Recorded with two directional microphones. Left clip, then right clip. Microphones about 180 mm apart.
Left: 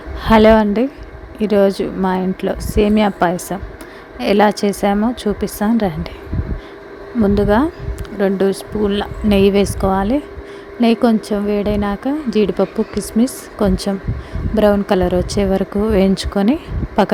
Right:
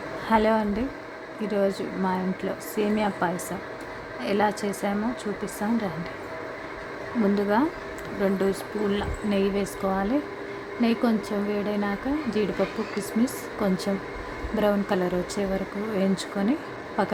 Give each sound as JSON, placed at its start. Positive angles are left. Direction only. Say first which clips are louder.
{"t": 0.3, "sound": "speech", "louder": "left 12 dB", "side_deg": 45}
{"t": 7.3, "sound": "speech", "louder": "left 10 dB", "side_deg": 40}
{"t": 9.3, "sound": "a woman's voice", "louder": "left 13 dB", "side_deg": 55}
{"t": 9.8, "sound": "speech", "louder": "left 9 dB", "side_deg": 40}